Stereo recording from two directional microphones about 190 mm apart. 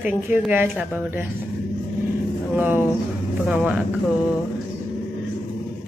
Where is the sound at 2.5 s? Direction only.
10° right (ahead or behind).